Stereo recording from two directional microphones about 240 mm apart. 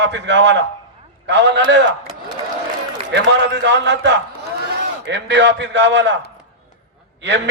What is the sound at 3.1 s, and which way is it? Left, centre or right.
A man's voice, right.